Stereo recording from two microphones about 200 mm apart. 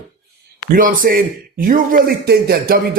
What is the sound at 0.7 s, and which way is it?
Speech, 45° right (ahead or behind).